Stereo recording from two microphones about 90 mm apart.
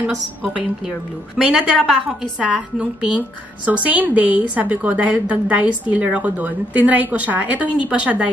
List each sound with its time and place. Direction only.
0.0 s a woman's voice: 15° right (ahead or behind)